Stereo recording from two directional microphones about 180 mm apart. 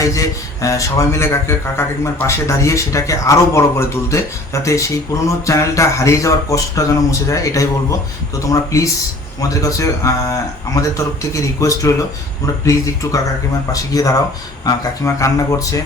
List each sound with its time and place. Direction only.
0.0 s a man's voice: 15° left (ahead or behind)